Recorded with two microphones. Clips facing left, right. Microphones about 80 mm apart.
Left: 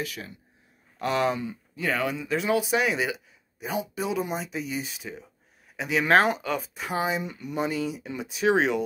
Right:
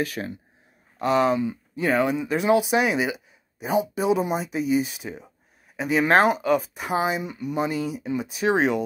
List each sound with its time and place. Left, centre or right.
0.0 s speech: right
1.0 s speech: centre
1.5 s speech: right
6.2 s speech: centre